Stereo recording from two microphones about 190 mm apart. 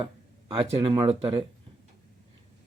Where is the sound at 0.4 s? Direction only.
30° right (ahead or behind).